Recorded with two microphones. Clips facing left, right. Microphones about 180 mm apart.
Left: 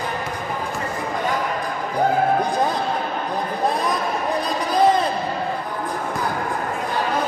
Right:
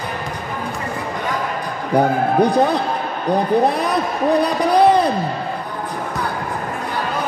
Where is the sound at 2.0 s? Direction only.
70° right (ahead or behind).